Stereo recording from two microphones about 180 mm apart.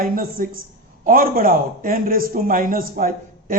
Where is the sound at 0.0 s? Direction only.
50° right (ahead or behind).